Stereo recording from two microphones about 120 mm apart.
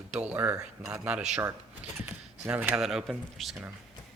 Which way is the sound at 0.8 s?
10° right (ahead or behind).